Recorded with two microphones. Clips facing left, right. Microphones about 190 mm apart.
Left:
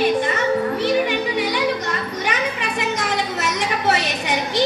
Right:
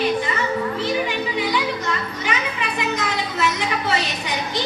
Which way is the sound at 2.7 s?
45° left (ahead or behind).